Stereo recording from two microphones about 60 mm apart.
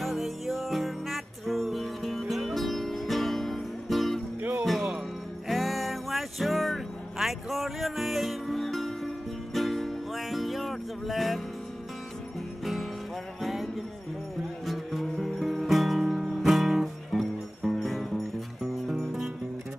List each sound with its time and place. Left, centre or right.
0.0 s music: centre
4.4 s music: right
5.5 s music: centre
13.4 s music: centre
18.6 s music: centre